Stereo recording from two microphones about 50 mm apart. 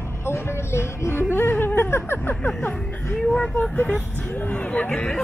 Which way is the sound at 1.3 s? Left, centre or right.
Left.